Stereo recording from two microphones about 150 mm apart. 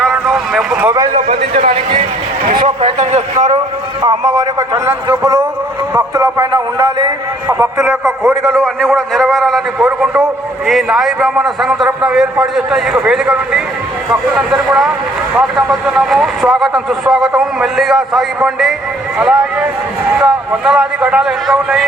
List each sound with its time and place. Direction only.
0.0 s vehicle: centre (ahead or behind)
1.1 s a man's voice: 45° right (ahead or behind)
3.0 s a sound: 50° right (ahead or behind)
4.0 s a man's voice: 30° right (ahead or behind)
8.4 s a man's voice: 5° left (ahead or behind)